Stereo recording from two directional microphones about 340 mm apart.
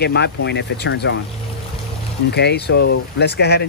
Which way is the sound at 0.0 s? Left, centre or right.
Left.